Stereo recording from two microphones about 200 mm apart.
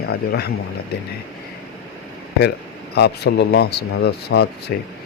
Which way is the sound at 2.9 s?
55° left (ahead or behind).